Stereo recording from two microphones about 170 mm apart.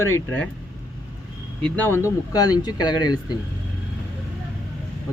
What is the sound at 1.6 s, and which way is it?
Speech, 10° left (ahead or behind).